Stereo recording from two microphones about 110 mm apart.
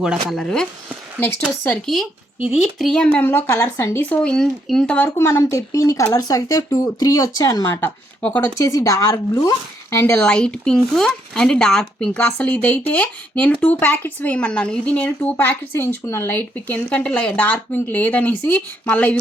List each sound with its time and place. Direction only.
0.0 s speech: 5° right (ahead or behind)
0.3 s speech: 5° left (ahead or behind)
1.9 s speech: 5° left (ahead or behind); by 4.2 s 20° left (ahead or behind)
4.2 s speech: 5° left (ahead or behind)
4.9 s speech: 20° left (ahead or behind)
7.6 s speech: 20° left (ahead or behind)
8.5 s speech: 30° left (ahead or behind)
10.2 s speech: 10° left (ahead or behind)